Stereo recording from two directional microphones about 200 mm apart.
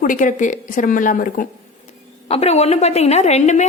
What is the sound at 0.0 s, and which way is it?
A woman's voice, 40° left (ahead or behind).